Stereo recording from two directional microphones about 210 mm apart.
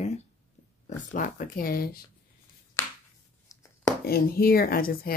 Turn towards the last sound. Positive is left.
turn(degrees=45)  # may be behind; listen again after turning